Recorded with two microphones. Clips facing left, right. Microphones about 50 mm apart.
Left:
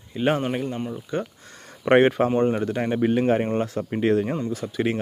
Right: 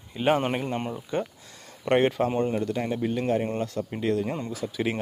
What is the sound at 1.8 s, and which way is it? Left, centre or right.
Speech, centre.